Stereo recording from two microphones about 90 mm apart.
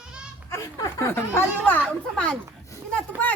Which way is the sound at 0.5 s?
35° left (ahead or behind).